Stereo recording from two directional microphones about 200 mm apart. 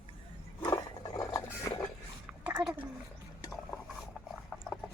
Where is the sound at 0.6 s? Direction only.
20° left (ahead or behind).